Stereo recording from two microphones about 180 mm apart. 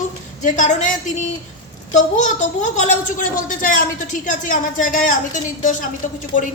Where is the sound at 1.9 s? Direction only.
45° left (ahead or behind).